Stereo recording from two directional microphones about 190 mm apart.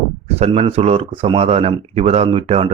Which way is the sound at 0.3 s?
35° right (ahead or behind).